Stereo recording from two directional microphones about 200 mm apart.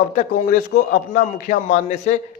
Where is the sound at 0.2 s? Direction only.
40° left (ahead or behind).